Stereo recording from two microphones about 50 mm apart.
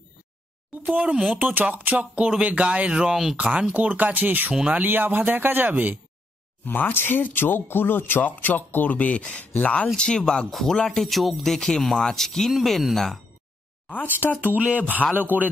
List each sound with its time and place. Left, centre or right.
1.0 s music: centre
1.4 s music: right
3.7 s speech: right
4.5 s music: right
4.8 s speech: right
6.6 s speech: left
9.9 s speech: centre
10.5 s speech: centre
14.5 s speech: right